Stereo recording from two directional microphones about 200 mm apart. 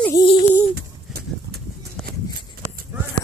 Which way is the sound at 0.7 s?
55° right (ahead or behind).